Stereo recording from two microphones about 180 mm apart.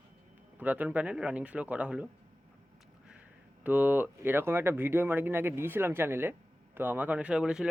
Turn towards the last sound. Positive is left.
turn(degrees=-5)  # may be behind; listen again after turning